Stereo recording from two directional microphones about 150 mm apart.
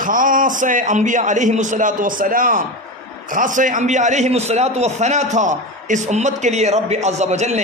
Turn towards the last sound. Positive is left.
turn(degrees=-50)  # may be behind; listen again after turning